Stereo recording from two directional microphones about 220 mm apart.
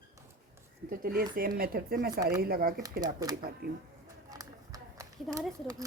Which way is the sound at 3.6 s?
45° right (ahead or behind).